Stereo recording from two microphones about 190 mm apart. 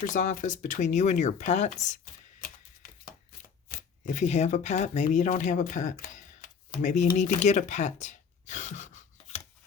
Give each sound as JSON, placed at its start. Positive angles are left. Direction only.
{"t": 0.1, "sound": "speech", "side_deg": 40}
{"t": 3.7, "sound": "speech", "side_deg": 40}